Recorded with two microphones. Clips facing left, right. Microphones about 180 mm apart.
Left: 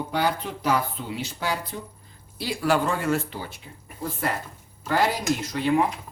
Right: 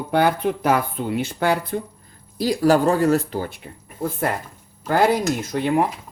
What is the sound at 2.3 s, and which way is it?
Speech, 40° right (ahead or behind).